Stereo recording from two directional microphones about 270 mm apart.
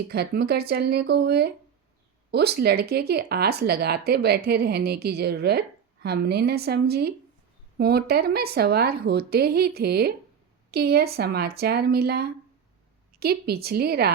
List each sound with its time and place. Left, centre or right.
0.1 s a woman's voice: right